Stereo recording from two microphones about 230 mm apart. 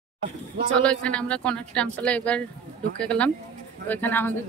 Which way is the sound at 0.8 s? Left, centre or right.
Centre.